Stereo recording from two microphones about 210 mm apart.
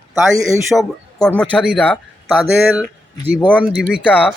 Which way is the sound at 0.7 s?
Centre (ahead or behind).